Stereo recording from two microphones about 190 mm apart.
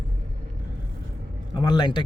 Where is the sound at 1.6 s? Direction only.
25° left (ahead or behind).